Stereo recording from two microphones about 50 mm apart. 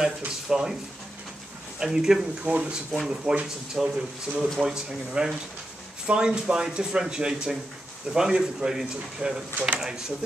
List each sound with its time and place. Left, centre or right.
0.5 s speech: centre
1.8 s speech: centre
2.4 s speech: right